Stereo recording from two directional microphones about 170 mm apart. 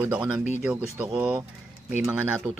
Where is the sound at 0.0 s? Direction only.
10° right (ahead or behind).